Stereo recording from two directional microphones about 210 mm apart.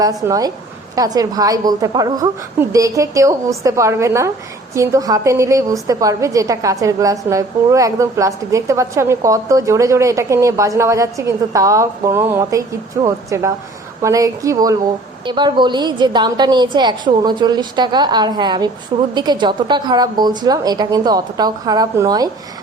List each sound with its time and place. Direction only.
0.0 s a woman's voice: 15° right (ahead or behind)